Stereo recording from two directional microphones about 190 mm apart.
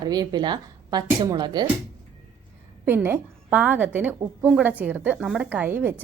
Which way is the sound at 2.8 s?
10° right (ahead or behind).